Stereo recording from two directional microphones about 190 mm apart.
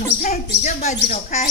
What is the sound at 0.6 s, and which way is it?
Speech, 40° left (ahead or behind).